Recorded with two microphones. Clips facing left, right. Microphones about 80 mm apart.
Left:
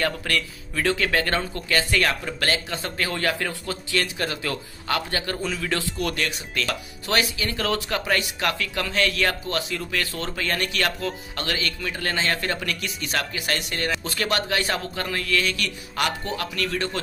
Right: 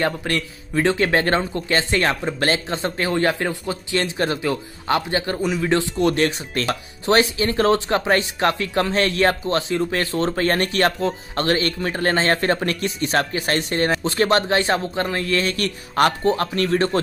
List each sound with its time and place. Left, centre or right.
0.0 s speech: right